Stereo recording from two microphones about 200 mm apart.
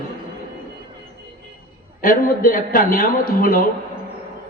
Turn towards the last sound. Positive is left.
turn(degrees=45)  # may be behind; listen again after turning